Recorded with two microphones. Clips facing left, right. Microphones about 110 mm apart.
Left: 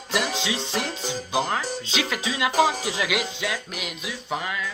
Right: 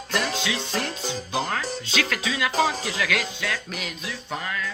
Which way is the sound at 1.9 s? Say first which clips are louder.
Right 2 dB; 20° left (ahead or behind).